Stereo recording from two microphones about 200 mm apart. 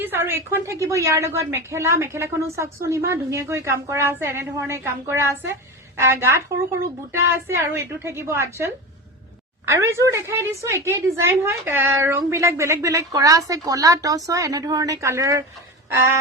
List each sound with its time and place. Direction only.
0.0 s a woman's voice: 10° right (ahead or behind)